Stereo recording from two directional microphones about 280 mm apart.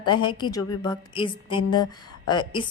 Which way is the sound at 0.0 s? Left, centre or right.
Centre.